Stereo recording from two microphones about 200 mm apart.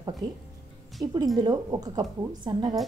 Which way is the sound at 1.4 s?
20° right (ahead or behind).